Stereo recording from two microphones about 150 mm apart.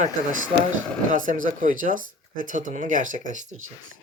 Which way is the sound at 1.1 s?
60° right (ahead or behind).